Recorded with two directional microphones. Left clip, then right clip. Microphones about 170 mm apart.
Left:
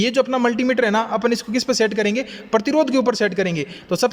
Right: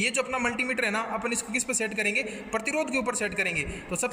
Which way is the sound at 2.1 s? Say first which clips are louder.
Left 8 dB; 55° left (ahead or behind).